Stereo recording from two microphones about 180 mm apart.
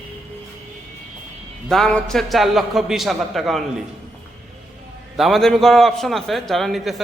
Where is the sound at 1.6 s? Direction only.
Centre (ahead or behind).